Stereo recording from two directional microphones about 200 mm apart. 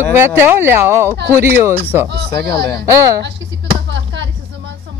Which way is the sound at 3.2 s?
60° right (ahead or behind).